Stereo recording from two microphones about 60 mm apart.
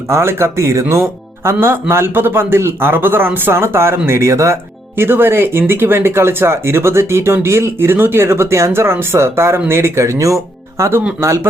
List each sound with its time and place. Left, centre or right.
0.1 s a man's voice: right
4.9 s speech: right